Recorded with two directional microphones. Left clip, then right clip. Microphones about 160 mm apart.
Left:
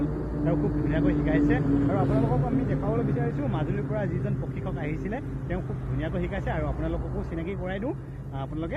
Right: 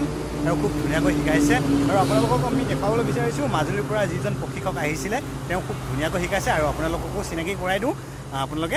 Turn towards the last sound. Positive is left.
turn(degrees=-30)  # may be behind; listen again after turning